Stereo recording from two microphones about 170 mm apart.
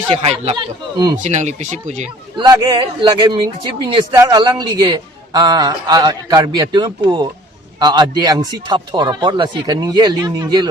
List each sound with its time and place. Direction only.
0.1 s speech: 35° right (ahead or behind)
0.5 s speech: 25° right (ahead or behind)
1.2 s speech: 45° right (ahead or behind)
2.4 s speech: 20° right (ahead or behind)